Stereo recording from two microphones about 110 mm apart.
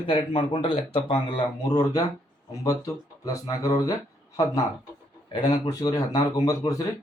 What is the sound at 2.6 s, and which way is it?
Speech, 30° left (ahead or behind).